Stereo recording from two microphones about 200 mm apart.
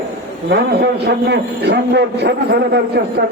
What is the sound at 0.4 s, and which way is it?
A man's voice, 50° right (ahead or behind).